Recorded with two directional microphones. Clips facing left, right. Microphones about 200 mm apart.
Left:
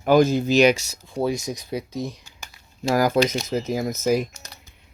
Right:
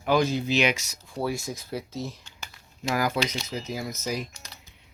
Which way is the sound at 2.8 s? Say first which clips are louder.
Left 7 dB; 40° left (ahead or behind).